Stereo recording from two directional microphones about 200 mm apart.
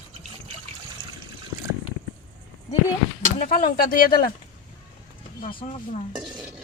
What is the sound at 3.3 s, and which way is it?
Speech, 40° left (ahead or behind).